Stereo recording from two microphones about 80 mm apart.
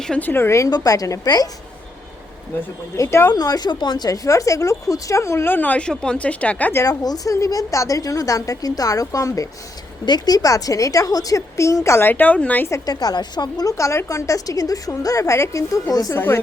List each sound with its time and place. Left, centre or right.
0.2 s speech: left
0.7 s a woman's voice: left
3.0 s speech: left
3.3 s speech: left; by 6.7 s centre
6.8 s a woman's voice: left
10.1 s a woman's voice: left; by 12.6 s centre
12.8 s a woman's voice: left
13.7 s a woman's voice: left
16.1 s speech: left